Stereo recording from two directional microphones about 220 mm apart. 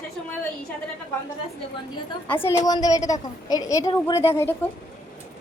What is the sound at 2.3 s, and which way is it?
A woman's voice, 10° left (ahead or behind).